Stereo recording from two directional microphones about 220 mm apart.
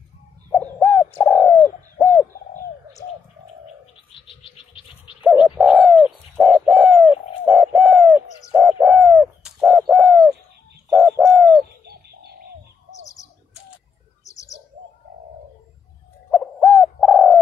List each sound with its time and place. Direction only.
0.5 s bird: centre (ahead or behind)
4.1 s a sound: 25° left (ahead or behind)
5.2 s bird: centre (ahead or behind)
14.2 s bird: 15° left (ahead or behind)
16.3 s bird: centre (ahead or behind)